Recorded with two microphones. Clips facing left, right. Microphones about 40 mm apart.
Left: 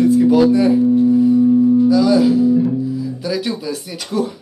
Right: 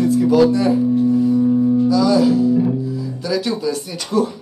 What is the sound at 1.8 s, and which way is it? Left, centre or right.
Music, centre.